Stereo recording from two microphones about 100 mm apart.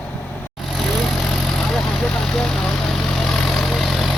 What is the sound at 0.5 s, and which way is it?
Vehicle, centre (ahead or behind).